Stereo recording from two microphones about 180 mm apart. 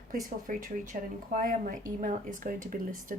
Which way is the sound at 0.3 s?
50° right (ahead or behind).